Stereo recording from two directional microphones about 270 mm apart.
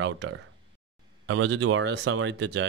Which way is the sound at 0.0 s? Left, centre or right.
Right.